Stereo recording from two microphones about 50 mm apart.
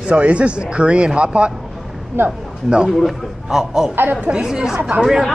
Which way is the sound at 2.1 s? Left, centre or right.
Right.